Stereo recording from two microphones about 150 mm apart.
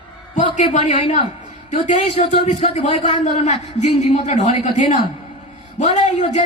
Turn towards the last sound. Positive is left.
turn(degrees=50)  # may be behind; listen again after turning